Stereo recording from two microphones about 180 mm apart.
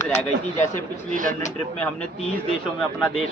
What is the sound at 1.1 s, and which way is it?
Speech, 45° right (ahead or behind).